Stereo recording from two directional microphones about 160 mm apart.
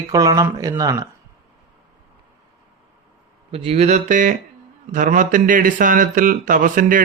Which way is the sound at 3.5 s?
40° right (ahead or behind).